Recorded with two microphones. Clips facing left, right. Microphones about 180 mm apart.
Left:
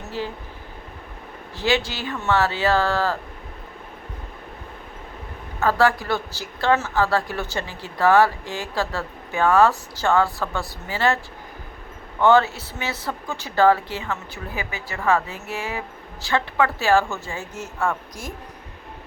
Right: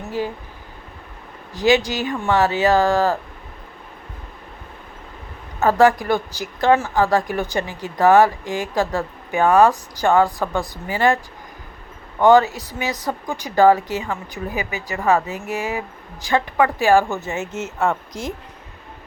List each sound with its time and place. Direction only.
1.5 s speech: 15° right (ahead or behind)
5.5 s speech: 20° right (ahead or behind)
12.2 s speech: 15° right (ahead or behind)
16.2 s a woman's voice: 15° right (ahead or behind)